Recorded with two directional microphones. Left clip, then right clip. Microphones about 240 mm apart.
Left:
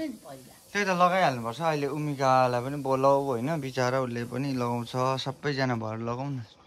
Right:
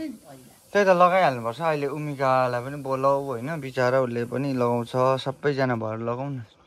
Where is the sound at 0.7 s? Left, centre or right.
Centre.